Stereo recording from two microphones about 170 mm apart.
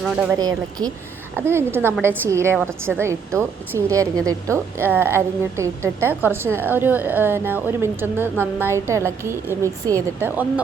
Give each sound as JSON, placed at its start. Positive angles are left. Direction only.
{"t": 0.0, "sound": "speech", "side_deg": -5}
{"t": 0.3, "sound": "a woman's voice", "side_deg": -25}